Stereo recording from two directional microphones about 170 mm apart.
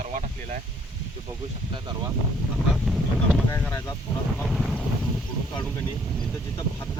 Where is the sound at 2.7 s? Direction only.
Centre (ahead or behind).